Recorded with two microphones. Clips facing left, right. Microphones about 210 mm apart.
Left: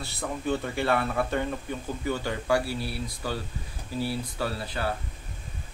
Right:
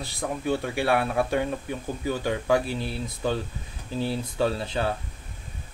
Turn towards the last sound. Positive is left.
turn(degrees=-25)  # may be behind; listen again after turning